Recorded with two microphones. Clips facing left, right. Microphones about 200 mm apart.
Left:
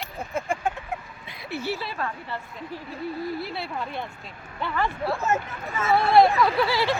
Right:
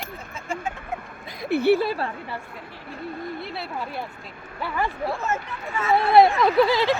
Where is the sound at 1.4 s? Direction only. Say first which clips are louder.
Right 11 dB; 55° right (ahead or behind).